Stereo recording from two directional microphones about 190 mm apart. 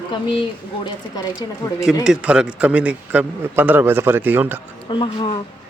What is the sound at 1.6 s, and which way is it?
Speech, 20° left (ahead or behind).